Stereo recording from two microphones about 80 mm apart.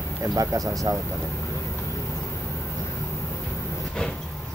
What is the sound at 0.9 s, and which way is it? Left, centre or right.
Speech, right.